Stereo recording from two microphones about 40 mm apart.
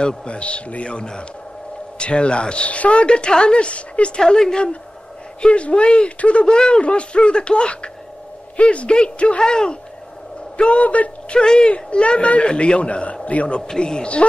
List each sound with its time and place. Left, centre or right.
0.0 s a man's voice: left
4.2 s a woman's voice: centre
5.4 s a man's voice: left
10.6 s speech: left
11.3 s a man's voice: centre
13.6 s a man's voice: centre